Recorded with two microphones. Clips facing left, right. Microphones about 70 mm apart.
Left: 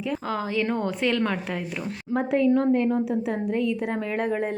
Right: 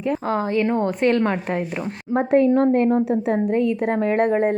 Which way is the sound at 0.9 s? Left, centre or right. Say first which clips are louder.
Right 5 dB; right.